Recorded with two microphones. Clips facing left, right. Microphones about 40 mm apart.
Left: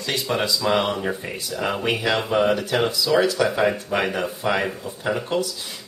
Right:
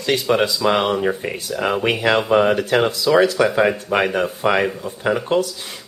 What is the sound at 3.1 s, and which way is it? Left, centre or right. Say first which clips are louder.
Speech: right 5 dB; right.